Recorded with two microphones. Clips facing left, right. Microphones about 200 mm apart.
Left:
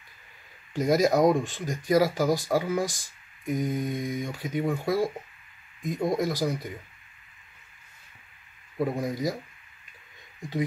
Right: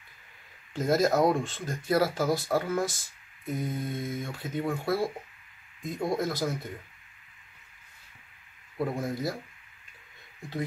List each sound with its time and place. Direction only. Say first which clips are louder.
0.7 s speech: left 2 dB; 15° left (ahead or behind)
8.9 s speech: left 3 dB; 15° left (ahead or behind)